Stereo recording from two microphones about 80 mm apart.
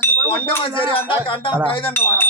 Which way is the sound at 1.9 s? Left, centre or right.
Left.